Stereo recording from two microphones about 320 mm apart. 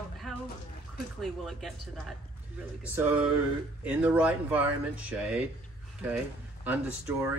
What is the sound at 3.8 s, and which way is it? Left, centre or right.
Speech, centre.